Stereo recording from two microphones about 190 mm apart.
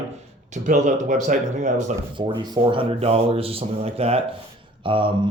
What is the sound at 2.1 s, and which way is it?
Speech, 25° right (ahead or behind).